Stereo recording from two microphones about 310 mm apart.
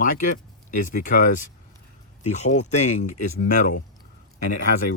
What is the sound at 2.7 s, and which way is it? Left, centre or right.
Speech, left.